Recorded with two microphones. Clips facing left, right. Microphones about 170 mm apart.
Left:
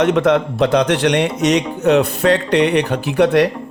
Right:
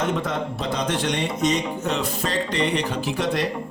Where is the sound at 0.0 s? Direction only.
75° left (ahead or behind).